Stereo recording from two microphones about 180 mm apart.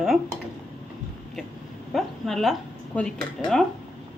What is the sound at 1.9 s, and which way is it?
Speech, centre (ahead or behind).